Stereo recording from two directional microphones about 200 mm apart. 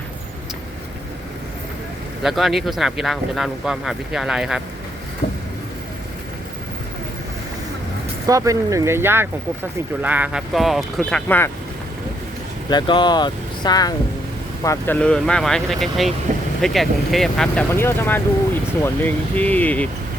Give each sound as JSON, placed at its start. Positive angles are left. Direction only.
{"t": 2.2, "sound": "speech", "side_deg": 0}
{"t": 5.2, "sound": "vehicle", "side_deg": 30}
{"t": 8.3, "sound": "speech", "side_deg": -15}
{"t": 12.7, "sound": "speech", "side_deg": 20}